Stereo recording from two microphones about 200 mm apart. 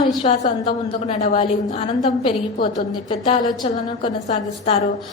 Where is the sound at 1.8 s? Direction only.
25° left (ahead or behind).